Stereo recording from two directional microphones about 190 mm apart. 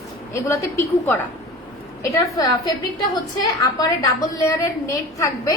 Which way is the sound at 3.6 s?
20° left (ahead or behind).